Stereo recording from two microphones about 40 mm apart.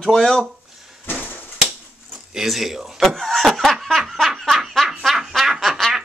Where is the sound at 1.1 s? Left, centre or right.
Left.